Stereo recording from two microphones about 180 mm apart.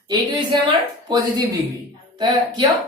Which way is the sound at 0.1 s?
25° right (ahead or behind).